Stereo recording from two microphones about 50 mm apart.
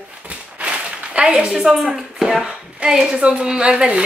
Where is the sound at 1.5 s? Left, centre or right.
Centre.